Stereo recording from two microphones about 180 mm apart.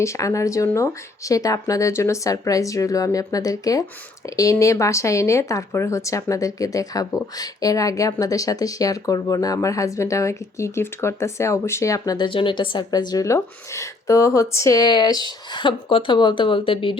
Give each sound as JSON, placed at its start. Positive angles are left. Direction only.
{"t": 0.0, "sound": "speech", "side_deg": 15}